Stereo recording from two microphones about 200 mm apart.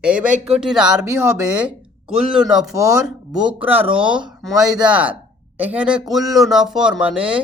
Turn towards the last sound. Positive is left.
turn(degrees=-5)  # may be behind; listen again after turning